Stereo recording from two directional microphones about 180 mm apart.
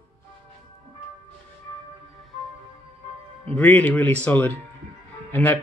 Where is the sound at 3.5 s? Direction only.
10° left (ahead or behind).